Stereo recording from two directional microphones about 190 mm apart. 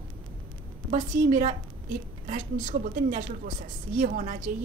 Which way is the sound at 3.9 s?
45° right (ahead or behind).